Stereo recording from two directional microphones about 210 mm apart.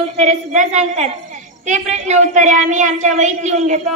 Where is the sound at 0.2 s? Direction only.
35° right (ahead or behind).